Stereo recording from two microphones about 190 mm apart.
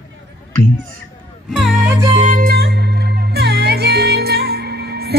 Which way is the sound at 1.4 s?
Centre (ahead or behind).